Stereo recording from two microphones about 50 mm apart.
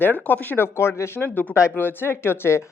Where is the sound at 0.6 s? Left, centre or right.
Left.